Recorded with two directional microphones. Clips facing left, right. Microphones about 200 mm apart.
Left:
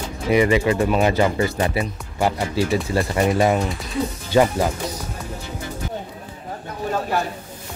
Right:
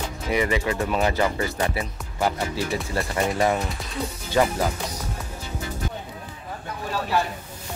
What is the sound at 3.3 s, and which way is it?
Speech, 20° left (ahead or behind).